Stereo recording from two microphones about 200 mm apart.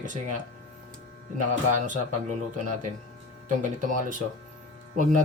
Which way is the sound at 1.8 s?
40° right (ahead or behind).